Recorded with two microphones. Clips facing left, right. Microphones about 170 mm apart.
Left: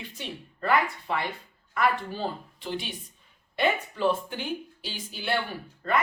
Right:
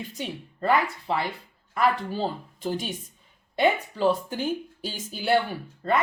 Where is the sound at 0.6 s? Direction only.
25° right (ahead or behind).